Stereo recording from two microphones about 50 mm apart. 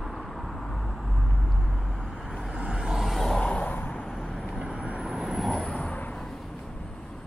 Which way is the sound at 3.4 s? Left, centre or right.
Left.